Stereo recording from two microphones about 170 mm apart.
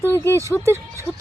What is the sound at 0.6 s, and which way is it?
Speech, 15° right (ahead or behind).